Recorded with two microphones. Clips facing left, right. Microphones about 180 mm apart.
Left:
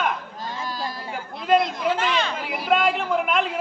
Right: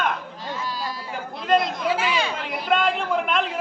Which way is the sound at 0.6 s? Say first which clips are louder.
Left 1 dB; 45° left (ahead or behind).